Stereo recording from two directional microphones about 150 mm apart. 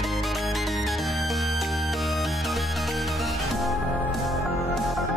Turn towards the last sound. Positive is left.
turn(degrees=0)  # may be behind; listen again after turning